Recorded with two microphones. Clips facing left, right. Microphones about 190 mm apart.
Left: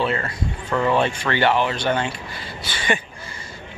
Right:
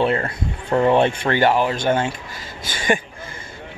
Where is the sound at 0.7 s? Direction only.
35° right (ahead or behind).